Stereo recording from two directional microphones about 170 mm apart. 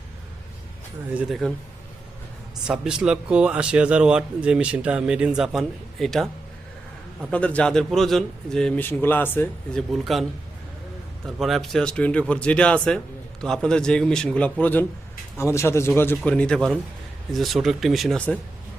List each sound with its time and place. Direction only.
1.1 s speech: centre (ahead or behind)
2.6 s speech: 5° right (ahead or behind)
7.3 s a man's voice: 5° left (ahead or behind)
9.9 s speech: centre (ahead or behind)
11.3 s a man's voice: centre (ahead or behind)